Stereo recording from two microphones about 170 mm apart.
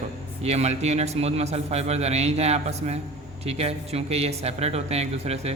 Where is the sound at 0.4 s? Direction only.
40° right (ahead or behind).